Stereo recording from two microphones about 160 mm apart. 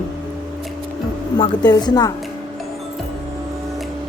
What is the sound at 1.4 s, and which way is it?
Speech, 25° left (ahead or behind).